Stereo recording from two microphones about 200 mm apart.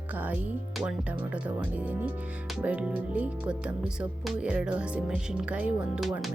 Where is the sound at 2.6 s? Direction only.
5° right (ahead or behind).